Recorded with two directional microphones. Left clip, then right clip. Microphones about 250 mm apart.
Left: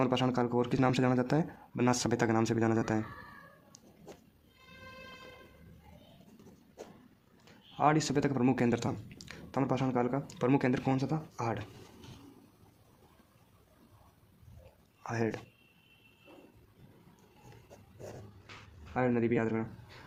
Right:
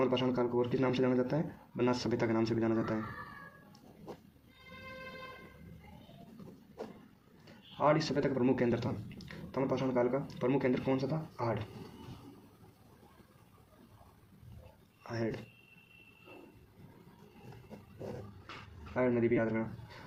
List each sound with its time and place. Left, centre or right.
0.0 s speech: left
7.8 s speech: left
15.1 s speech: left
18.9 s speech: left